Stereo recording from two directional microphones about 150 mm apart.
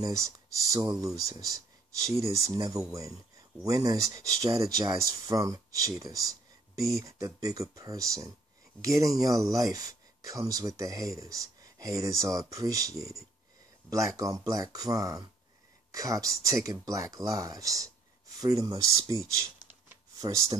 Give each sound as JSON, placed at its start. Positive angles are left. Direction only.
{"t": 0.0, "sound": "speech", "side_deg": -25}